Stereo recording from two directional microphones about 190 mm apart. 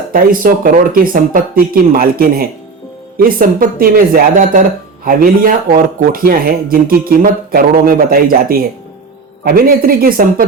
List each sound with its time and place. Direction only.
0.1 s speech: 45° right (ahead or behind)